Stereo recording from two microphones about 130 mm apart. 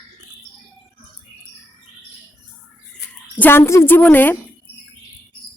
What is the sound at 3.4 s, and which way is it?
Speech, 20° left (ahead or behind).